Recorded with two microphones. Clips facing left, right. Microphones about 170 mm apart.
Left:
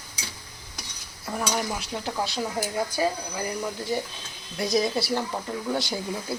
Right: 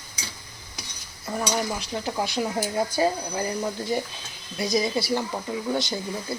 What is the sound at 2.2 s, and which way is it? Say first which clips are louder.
Speech: right 3 dB; 15° right (ahead or behind).